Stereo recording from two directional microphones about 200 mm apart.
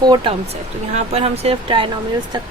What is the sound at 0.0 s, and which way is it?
Speech, 20° right (ahead or behind).